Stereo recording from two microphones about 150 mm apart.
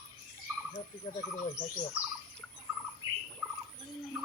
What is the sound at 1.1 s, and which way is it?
Speech, 30° left (ahead or behind).